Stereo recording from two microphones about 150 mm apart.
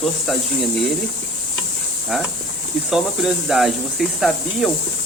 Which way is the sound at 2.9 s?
Centre (ahead or behind).